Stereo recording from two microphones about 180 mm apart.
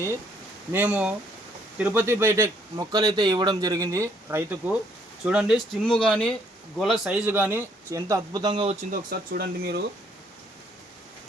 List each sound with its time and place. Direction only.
0.7 s speech: 10° right (ahead or behind); by 8.9 s 35° right (ahead or behind)
8.9 s speech: 55° right (ahead or behind)